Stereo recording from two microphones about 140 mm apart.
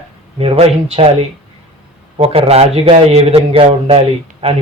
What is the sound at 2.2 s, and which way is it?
Speech, 45° right (ahead or behind).